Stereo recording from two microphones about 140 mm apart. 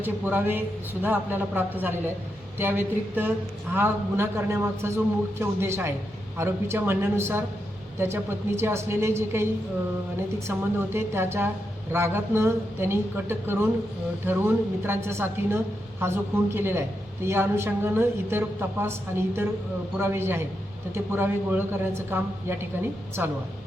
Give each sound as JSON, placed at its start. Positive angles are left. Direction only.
{"t": 0.0, "sound": "a woman's voice", "side_deg": -15}